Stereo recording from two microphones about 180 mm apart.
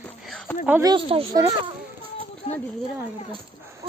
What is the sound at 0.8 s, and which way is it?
Speech, 30° right (ahead or behind).